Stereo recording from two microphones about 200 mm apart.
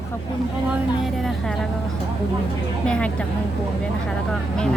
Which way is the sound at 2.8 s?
5° left (ahead or behind).